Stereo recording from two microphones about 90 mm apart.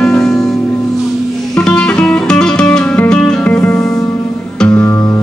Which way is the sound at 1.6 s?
15° left (ahead or behind).